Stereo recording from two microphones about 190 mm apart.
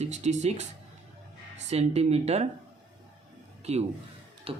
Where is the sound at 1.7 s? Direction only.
35° right (ahead or behind).